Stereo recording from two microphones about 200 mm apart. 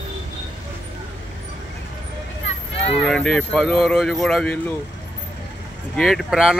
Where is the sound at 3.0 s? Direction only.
5° left (ahead or behind).